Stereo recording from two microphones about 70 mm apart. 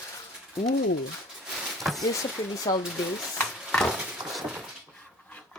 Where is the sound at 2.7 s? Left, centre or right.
Left.